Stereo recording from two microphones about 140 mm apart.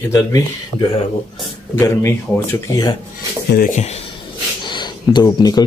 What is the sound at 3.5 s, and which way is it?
Speech, 90° left.